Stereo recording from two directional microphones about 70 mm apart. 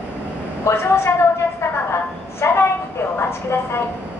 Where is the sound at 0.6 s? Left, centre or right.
Left.